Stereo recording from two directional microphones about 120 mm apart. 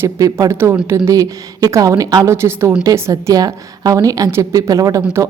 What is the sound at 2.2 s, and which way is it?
A woman's voice, 20° right (ahead or behind).